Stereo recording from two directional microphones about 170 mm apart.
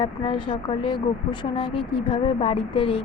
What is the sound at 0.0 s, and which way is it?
A woman's voice, 30° left (ahead or behind).